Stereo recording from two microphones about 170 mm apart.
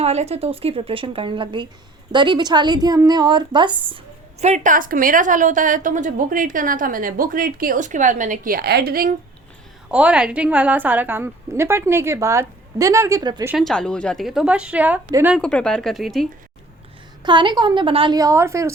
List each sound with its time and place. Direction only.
0.0 s a woman's voice: 40° right (ahead or behind); by 9.1 s 60° right (ahead or behind)
9.9 s a woman's voice: 5° right (ahead or behind); by 13.5 s 20° right (ahead or behind)
13.5 s a woman's voice: centre (ahead or behind)
15.4 s speech: 5° left (ahead or behind)
17.2 s a woman's voice: 25° right (ahead or behind)